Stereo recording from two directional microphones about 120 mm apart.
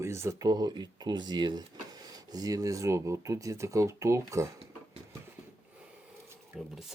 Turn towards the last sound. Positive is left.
turn(degrees=-5)  # may be behind; listen again after turning